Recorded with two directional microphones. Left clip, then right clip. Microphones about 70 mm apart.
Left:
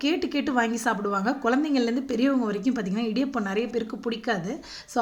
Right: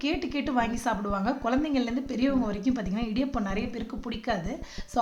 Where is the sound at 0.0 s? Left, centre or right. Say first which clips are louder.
Left 4 dB; left.